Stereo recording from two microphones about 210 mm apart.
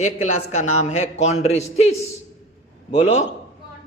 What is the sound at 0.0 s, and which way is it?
A man's voice, 35° left (ahead or behind).